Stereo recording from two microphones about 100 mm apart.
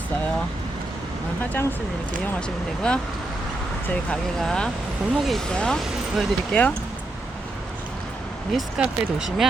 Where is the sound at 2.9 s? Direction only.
10° left (ahead or behind).